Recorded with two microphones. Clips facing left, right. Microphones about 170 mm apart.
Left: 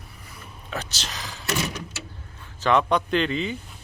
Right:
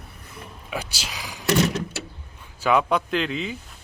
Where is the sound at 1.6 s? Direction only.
70° right (ahead or behind).